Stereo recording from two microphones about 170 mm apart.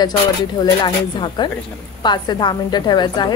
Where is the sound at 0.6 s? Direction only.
25° left (ahead or behind).